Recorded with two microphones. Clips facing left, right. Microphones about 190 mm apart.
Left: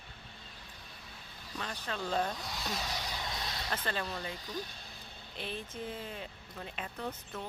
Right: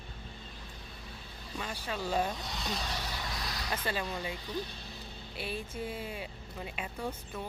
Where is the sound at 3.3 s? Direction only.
25° left (ahead or behind).